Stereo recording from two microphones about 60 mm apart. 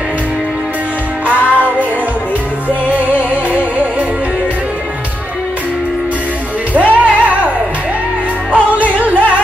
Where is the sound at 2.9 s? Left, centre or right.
Right.